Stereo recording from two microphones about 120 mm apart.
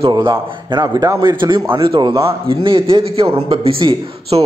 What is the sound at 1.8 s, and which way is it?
A man's voice, 45° right (ahead or behind).